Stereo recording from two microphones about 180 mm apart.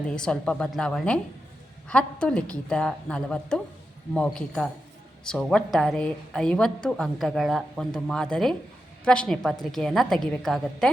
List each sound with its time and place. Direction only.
0.2 s a woman's voice: 5° left (ahead or behind)